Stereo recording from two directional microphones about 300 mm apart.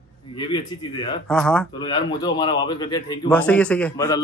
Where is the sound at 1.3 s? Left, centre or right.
Centre.